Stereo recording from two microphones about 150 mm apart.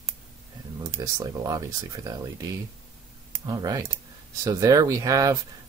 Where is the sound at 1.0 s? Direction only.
25° right (ahead or behind).